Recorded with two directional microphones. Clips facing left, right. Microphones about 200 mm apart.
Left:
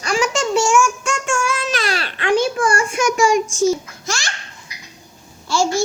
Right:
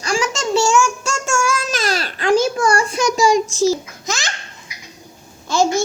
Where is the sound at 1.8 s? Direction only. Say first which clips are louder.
Right 2 dB; 40° right (ahead or behind).